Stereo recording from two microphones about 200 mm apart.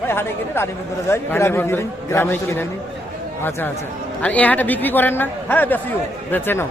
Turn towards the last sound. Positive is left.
turn(degrees=10)  # may be behind; listen again after turning